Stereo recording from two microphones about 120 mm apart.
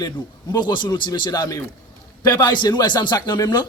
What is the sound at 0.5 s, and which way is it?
A man's voice, 40° left (ahead or behind).